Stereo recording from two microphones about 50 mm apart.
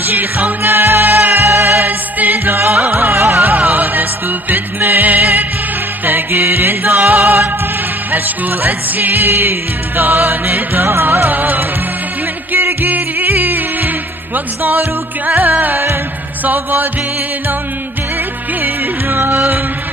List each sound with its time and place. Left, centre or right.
0.0 s music: right
1.9 s music: right
3.5 s music: right
10.9 s music: right
11.2 s music: right
12.8 s music: right
18.6 s music: right